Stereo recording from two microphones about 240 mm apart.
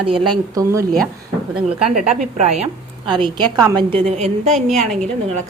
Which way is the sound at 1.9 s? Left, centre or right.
Right.